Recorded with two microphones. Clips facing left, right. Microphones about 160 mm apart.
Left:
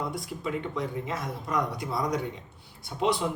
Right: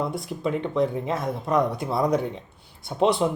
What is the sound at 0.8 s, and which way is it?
Speech, 25° right (ahead or behind).